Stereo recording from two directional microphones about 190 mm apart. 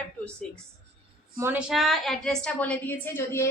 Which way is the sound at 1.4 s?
10° right (ahead or behind).